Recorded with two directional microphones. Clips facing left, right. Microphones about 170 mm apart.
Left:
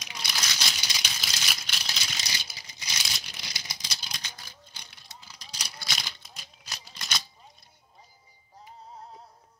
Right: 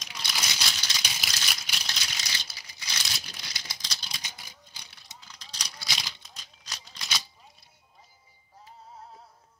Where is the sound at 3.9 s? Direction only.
5° left (ahead or behind).